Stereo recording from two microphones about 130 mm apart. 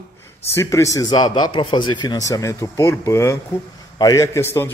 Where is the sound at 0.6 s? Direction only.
25° left (ahead or behind).